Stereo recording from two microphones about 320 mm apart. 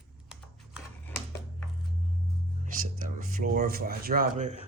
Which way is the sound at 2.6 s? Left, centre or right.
Right.